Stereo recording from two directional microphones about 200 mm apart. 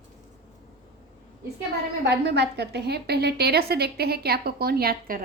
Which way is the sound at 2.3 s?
55° right (ahead or behind).